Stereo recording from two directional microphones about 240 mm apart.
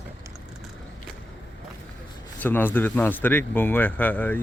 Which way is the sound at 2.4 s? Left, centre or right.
Centre.